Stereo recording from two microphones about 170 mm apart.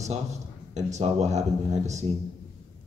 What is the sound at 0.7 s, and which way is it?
Speech, 40° right (ahead or behind).